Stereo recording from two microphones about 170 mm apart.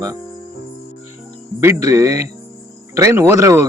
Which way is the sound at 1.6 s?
15° right (ahead or behind).